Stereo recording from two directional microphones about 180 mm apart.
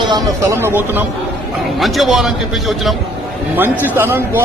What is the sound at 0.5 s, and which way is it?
Speech, 15° right (ahead or behind).